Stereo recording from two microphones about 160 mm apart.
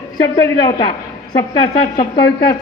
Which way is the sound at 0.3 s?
20° left (ahead or behind).